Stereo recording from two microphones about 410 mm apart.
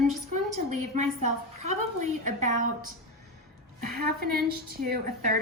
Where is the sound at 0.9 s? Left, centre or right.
Right.